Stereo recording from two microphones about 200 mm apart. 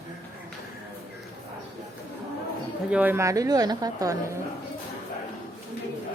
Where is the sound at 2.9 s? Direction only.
10° right (ahead or behind).